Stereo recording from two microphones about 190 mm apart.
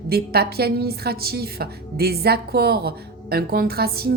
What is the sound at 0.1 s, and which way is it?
A woman's voice, 55° right (ahead or behind).